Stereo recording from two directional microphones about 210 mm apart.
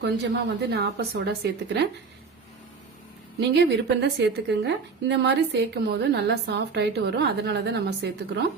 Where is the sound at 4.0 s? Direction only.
55° right (ahead or behind).